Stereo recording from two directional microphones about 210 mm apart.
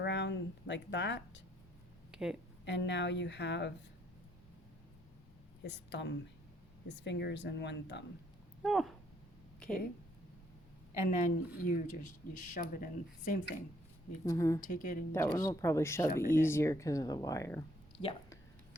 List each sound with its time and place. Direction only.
0.0 s a sound: 55° left (ahead or behind)
2.1 s a sound: 5° right (ahead or behind)
2.6 s a woman's voice: 55° left (ahead or behind)
5.6 s a woman's voice: 55° left (ahead or behind)
8.6 s speech: centre (ahead or behind)
11.1 s speech: 40° left (ahead or behind)
14.3 s speech: 15° left (ahead or behind)
14.6 s speech: 40° left (ahead or behind)
15.1 s speech: 15° left (ahead or behind)